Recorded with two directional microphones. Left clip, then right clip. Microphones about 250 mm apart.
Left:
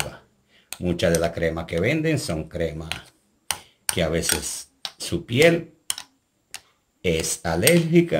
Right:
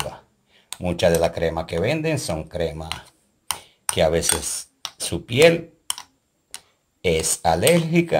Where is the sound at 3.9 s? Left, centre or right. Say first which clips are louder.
Right 4 dB; right.